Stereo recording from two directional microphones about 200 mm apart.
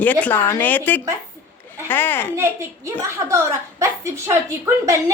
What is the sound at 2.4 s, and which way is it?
A woman's voice, 15° right (ahead or behind).